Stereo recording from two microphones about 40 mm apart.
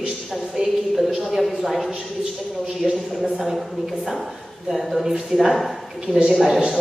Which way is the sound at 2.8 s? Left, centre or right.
Centre.